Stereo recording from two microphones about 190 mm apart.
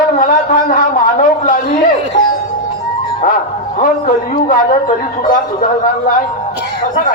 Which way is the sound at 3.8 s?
45° left (ahead or behind).